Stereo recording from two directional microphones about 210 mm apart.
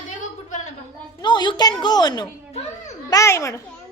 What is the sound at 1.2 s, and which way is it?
A woman's voice, 20° left (ahead or behind).